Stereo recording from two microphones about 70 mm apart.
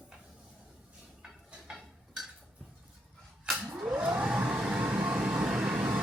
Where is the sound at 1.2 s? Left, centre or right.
Centre.